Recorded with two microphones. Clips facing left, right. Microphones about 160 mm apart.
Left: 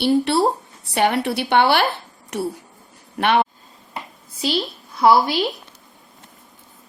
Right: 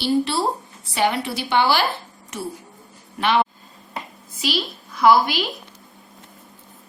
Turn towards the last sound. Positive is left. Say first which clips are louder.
# left 1 dB
turn(degrees=30)  # may be behind; listen again after turning